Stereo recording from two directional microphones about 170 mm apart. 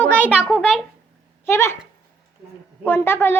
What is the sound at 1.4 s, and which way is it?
Speech, 15° left (ahead or behind).